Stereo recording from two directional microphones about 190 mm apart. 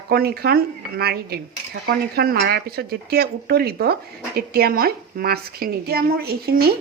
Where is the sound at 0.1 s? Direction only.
55° right (ahead or behind).